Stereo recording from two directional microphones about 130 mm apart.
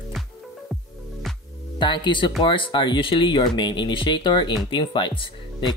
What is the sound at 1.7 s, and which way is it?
Speech, 35° left (ahead or behind).